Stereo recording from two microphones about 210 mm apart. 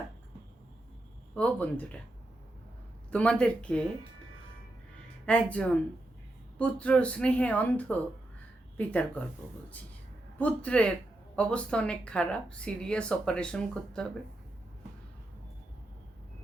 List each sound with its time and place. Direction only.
1.4 s speech: 5° left (ahead or behind)
3.1 s speech: 5° left (ahead or behind)
5.2 s speech: 5° left (ahead or behind)
10.3 s speech: 5° left (ahead or behind)